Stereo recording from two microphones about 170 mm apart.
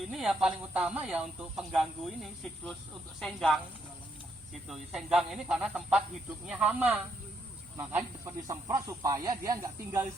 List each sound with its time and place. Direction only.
0.1 s speech: 5° right (ahead or behind)
4.7 s speech: centre (ahead or behind)